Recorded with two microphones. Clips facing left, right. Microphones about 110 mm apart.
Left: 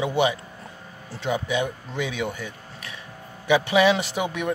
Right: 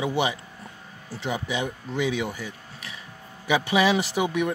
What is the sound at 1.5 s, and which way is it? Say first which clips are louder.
Speech: left 3 dB; 15° right (ahead or behind).